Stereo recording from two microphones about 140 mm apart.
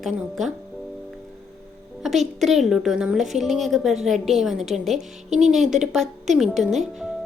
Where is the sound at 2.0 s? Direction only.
Centre (ahead or behind).